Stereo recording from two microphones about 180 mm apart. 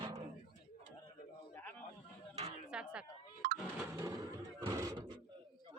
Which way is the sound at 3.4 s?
55° right (ahead or behind).